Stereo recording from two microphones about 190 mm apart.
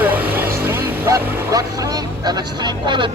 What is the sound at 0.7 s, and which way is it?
Vehicle, 10° right (ahead or behind).